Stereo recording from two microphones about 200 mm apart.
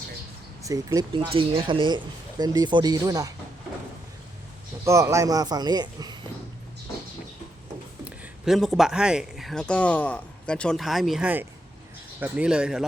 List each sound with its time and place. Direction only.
0.6 s speech: 15° right (ahead or behind)
4.9 s speech: 15° right (ahead or behind)
8.0 s speech: 5° right (ahead or behind)